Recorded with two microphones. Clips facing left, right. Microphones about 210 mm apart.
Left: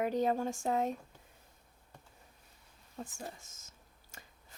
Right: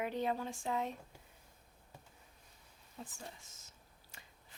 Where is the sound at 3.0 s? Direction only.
45° left (ahead or behind).